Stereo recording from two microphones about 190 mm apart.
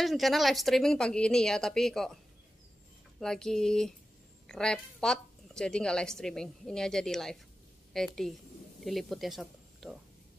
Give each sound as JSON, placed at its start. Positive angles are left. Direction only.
{"t": 0.0, "sound": "a woman's voice", "side_deg": 0}
{"t": 3.2, "sound": "a woman's voice", "side_deg": 5}